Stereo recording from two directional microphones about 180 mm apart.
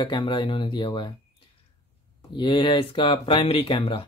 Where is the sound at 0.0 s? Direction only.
25° left (ahead or behind).